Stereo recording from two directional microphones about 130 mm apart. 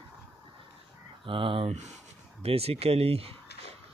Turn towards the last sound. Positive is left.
turn(degrees=-50)  # may be behind; listen again after turning